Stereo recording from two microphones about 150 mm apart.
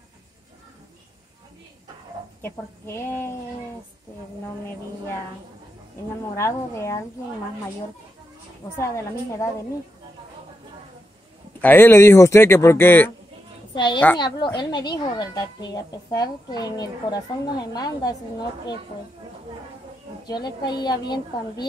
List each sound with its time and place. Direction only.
2.4 s speech: 15° left (ahead or behind)
6.3 s a woman's voice: 20° left (ahead or behind)
8.7 s a woman's voice: 20° left (ahead or behind)
11.6 s speech: 15° left (ahead or behind)
13.7 s a woman's voice: 30° left (ahead or behind)
20.2 s a woman's voice: 30° left (ahead or behind)